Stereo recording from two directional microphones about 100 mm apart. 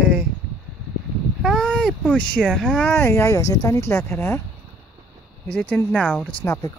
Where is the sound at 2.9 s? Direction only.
25° left (ahead or behind).